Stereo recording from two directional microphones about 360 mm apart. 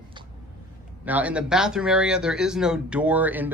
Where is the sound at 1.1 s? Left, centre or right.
Centre.